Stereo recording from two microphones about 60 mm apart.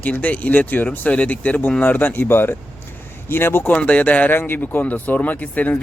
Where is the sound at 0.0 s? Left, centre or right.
Left.